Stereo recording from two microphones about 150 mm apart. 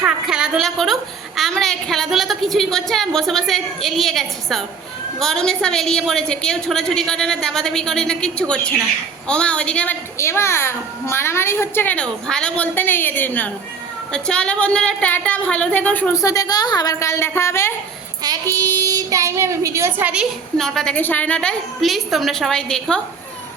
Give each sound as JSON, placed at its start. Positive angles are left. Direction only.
{"t": 0.0, "sound": "a woman's voice", "side_deg": -5}
{"t": 16.1, "sound": "a woman's voice", "side_deg": 20}
{"t": 18.2, "sound": "speech", "side_deg": -25}
{"t": 20.6, "sound": "a woman's voice", "side_deg": 5}